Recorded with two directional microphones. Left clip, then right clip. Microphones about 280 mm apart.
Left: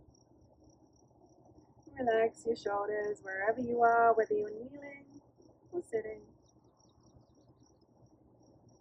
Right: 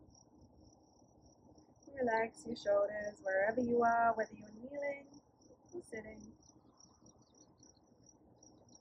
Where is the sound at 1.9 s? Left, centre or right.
Centre.